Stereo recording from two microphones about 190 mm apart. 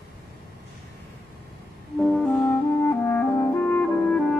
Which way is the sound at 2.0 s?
5° left (ahead or behind).